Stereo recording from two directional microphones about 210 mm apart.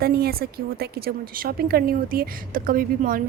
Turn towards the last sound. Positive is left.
turn(degrees=-40)  # may be behind; listen again after turning